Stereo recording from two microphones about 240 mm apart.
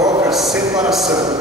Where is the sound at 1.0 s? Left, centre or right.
Centre.